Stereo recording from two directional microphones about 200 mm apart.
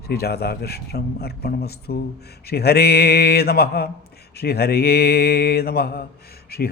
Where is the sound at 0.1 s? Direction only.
50° left (ahead or behind).